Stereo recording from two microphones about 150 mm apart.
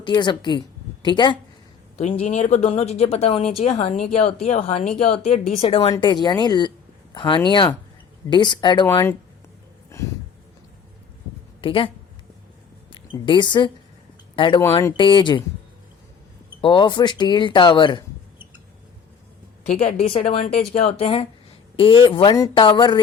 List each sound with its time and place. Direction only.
0.2 s speech: 30° left (ahead or behind)
2.0 s speech: 50° left (ahead or behind); by 8.9 s 30° left (ahead or behind)
11.6 s speech: 35° left (ahead or behind)
12.9 s a woman's voice: 35° left (ahead or behind)
16.6 s speech: 35° left (ahead or behind)
19.8 s speech: 40° left (ahead or behind)
20.5 s speech: 5° left (ahead or behind)
20.7 s speech: 45° left (ahead or behind)